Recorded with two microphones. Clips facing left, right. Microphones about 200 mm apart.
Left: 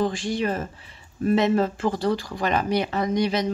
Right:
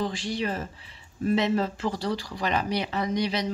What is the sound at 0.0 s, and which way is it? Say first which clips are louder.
Speech: left 5 dB; 50° left (ahead or behind).